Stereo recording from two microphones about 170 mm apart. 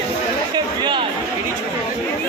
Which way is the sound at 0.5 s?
25° right (ahead or behind).